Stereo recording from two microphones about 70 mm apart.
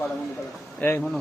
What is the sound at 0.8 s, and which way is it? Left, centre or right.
Speech, left.